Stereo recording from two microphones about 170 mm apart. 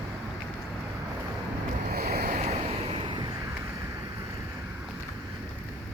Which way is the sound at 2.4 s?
35° right (ahead or behind).